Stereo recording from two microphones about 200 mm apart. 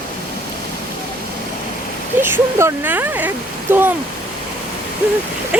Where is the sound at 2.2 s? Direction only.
10° right (ahead or behind).